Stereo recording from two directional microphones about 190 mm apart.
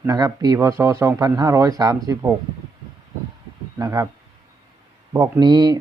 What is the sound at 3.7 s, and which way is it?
Speech, 15° right (ahead or behind).